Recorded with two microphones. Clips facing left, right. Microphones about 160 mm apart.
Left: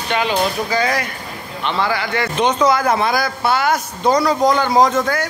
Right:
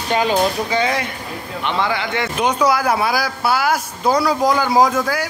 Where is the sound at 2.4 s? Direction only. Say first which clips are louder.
Left 2 dB; 10° right (ahead or behind).